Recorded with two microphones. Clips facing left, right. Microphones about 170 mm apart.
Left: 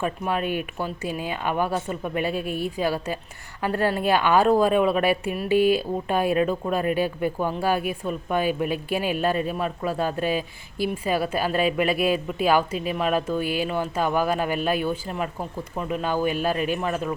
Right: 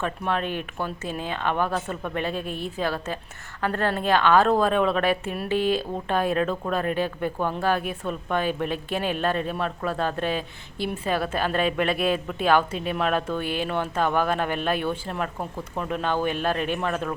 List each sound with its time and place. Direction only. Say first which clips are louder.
0.0 s a woman's voice: left 1 dB; 10° left (ahead or behind)